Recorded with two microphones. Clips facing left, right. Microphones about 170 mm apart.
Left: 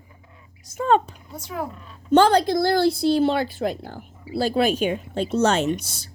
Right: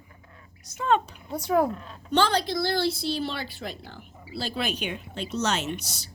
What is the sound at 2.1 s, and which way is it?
A woman's voice, 50° left (ahead or behind).